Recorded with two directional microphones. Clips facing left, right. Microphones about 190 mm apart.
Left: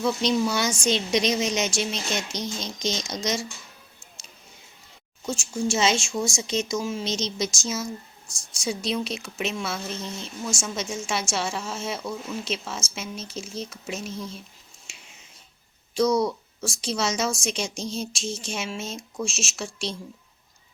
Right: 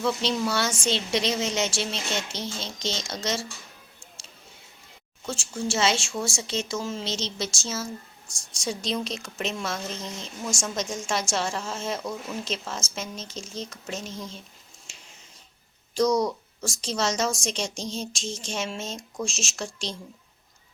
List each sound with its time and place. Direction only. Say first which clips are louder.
0.0 s a woman's voice: left 3 dB; 15° left (ahead or behind)
5.6 s a woman's voice: left 2 dB; 15° left (ahead or behind)
16.0 s a woman's voice: left 1 dB; 5° left (ahead or behind)